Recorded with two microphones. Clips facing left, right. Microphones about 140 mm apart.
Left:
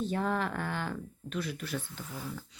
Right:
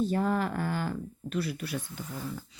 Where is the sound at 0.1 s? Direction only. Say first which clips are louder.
Right 3 dB; 5° right (ahead or behind).